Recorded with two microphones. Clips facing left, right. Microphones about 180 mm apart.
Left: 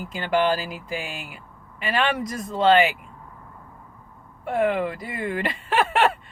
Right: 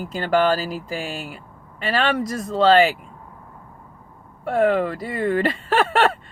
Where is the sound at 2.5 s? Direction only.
35° right (ahead or behind).